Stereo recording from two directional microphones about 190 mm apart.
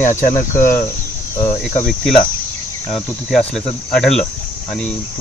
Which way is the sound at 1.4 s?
15° left (ahead or behind).